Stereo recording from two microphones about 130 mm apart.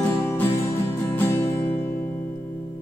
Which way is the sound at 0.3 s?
20° left (ahead or behind).